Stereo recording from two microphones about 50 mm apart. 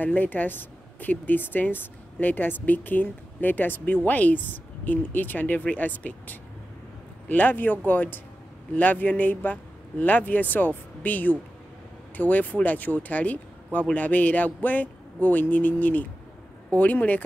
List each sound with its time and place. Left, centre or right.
0.0 s speech: left